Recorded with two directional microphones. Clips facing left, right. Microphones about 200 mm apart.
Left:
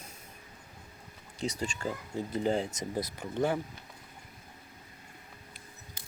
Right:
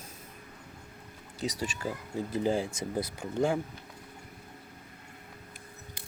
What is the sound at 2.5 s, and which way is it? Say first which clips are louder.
Speech: right 1 dB; 25° left (ahead or behind).